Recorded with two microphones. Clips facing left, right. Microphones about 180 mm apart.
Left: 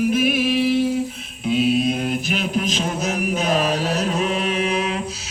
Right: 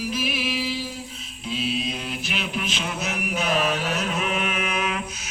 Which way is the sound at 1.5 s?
50° left (ahead or behind).